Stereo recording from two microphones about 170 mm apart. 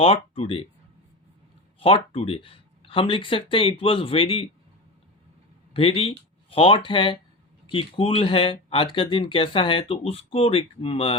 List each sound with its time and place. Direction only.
0.0 s speech: 35° left (ahead or behind)
1.8 s speech: 35° left (ahead or behind)
5.7 s speech: 35° left (ahead or behind)